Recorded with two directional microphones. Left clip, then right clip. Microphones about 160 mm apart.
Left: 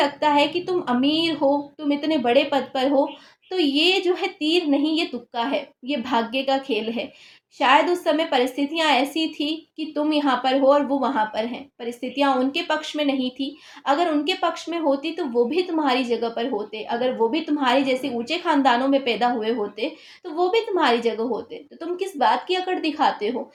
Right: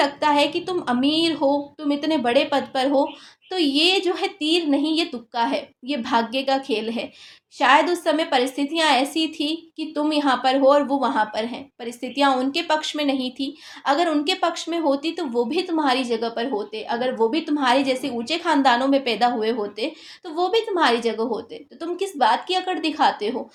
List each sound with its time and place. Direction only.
0.0 s a woman's voice: 25° right (ahead or behind)